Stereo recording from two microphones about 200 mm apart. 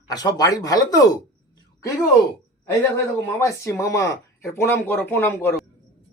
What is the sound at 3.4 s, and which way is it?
Speech, 15° left (ahead or behind).